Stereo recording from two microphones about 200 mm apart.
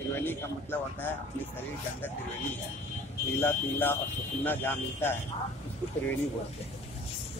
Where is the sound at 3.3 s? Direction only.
10° left (ahead or behind).